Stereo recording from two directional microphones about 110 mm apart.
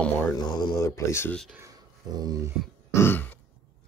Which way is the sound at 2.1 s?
35° right (ahead or behind).